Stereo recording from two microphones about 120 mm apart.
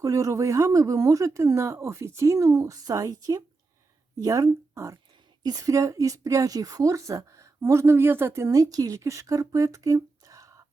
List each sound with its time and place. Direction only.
0.0 s speech: 25° right (ahead or behind)